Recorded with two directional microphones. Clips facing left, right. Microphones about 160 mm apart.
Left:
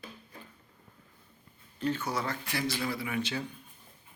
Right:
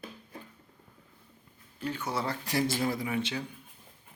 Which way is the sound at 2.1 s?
30° right (ahead or behind).